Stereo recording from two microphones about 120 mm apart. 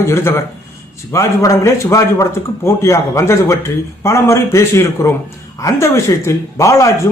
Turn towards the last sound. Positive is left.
turn(degrees=25)  # may be behind; listen again after turning